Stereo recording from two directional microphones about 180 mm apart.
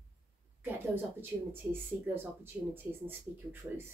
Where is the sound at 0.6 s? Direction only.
10° right (ahead or behind).